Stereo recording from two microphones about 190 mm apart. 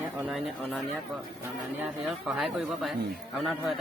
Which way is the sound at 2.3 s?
Centre (ahead or behind).